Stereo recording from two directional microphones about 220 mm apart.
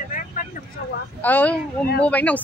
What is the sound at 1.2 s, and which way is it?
Speech, 10° left (ahead or behind).